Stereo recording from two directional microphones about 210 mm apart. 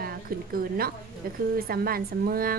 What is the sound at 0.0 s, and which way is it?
Speech, 45° right (ahead or behind).